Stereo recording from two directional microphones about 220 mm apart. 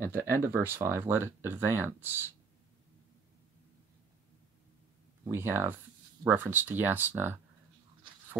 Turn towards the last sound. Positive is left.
turn(degrees=-10)  # may be behind; listen again after turning